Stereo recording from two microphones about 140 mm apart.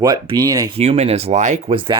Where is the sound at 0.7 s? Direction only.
45° right (ahead or behind).